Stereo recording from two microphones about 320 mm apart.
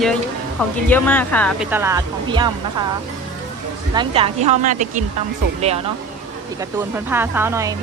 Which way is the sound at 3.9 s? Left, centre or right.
Centre.